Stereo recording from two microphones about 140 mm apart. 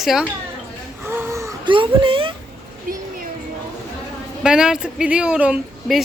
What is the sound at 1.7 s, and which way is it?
Speech, 35° right (ahead or behind).